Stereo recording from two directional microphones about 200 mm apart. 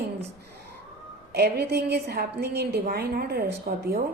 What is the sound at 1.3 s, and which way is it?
A woman's voice, 55° right (ahead or behind).